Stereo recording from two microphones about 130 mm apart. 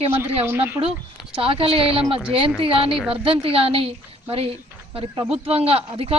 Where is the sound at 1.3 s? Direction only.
45° right (ahead or behind).